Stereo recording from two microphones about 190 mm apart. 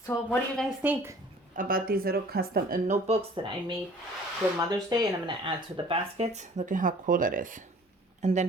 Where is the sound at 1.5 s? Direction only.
45° right (ahead or behind).